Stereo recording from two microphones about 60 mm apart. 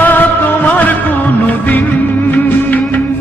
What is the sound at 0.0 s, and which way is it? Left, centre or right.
Music, left.